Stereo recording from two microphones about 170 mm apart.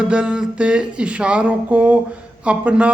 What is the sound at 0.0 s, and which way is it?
Speech, 5° right (ahead or behind).